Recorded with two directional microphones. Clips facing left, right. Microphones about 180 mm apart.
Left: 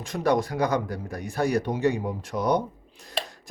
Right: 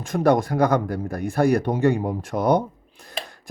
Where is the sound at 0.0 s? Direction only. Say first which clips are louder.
Right 5 dB; 50° right (ahead or behind).